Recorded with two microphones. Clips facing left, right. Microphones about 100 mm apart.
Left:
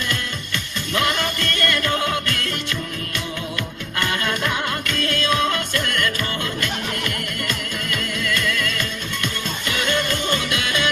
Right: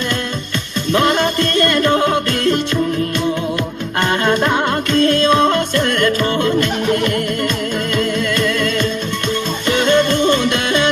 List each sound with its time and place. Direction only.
0.9 s music: 30° right (ahead or behind)
4.0 s music: 35° right (ahead or behind)